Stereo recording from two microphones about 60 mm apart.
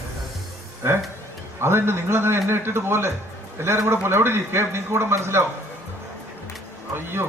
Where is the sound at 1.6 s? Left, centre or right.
Right.